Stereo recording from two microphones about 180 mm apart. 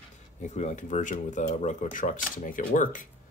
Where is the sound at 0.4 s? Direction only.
40° left (ahead or behind).